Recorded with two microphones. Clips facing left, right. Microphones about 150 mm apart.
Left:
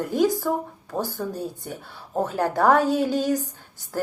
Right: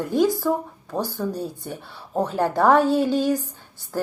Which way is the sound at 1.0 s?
45° left (ahead or behind).